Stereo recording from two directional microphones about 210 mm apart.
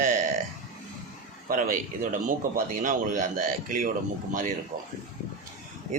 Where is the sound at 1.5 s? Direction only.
40° right (ahead or behind).